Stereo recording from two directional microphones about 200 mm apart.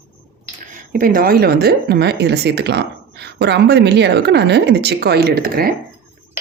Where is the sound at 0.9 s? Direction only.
45° right (ahead or behind).